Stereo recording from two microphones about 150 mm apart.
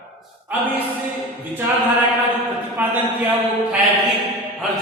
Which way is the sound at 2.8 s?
10° right (ahead or behind).